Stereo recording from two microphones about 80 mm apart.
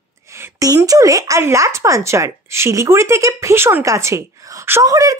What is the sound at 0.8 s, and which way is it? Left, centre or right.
A woman's voice, right.